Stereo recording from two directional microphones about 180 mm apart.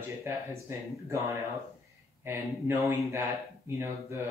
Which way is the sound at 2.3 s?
15° right (ahead or behind).